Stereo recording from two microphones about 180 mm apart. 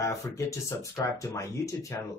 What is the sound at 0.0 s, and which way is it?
Speech, 15° left (ahead or behind).